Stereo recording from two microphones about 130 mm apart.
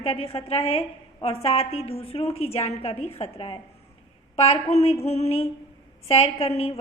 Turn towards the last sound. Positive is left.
turn(degrees=50)  # may be behind; listen again after turning